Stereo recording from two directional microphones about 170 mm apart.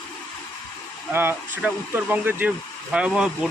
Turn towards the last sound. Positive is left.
turn(degrees=-5)  # may be behind; listen again after turning